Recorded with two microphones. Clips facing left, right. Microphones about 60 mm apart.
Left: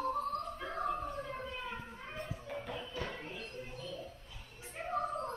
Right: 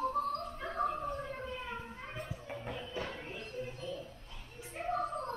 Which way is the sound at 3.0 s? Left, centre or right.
Centre.